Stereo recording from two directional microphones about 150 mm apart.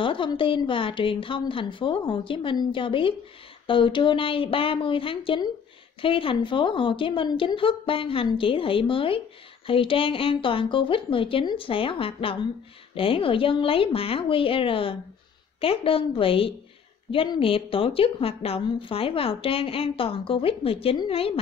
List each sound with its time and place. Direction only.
0.0 s a woman's voice: 35° left (ahead or behind)